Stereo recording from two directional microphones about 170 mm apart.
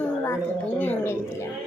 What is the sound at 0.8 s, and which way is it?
Speech, 10° left (ahead or behind).